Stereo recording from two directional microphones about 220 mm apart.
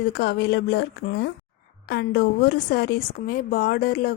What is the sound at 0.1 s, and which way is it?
A woman's voice, 45° left (ahead or behind).